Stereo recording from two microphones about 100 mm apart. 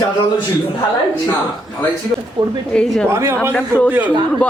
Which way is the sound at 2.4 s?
50° right (ahead or behind).